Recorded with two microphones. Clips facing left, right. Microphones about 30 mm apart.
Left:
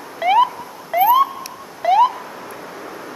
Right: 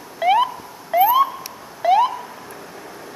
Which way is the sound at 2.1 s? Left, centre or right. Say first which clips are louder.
Left 1 dB; centre.